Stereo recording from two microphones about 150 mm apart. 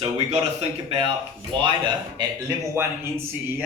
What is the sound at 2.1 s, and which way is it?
Speech, 20° right (ahead or behind).